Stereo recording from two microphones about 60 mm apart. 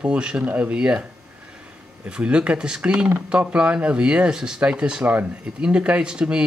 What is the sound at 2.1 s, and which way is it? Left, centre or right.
Speech, centre.